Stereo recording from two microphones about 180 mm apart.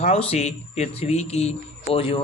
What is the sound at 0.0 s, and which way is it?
Speech, 35° left (ahead or behind).